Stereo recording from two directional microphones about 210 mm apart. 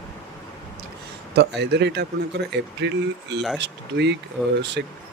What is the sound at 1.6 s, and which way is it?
Speech, 55° right (ahead or behind).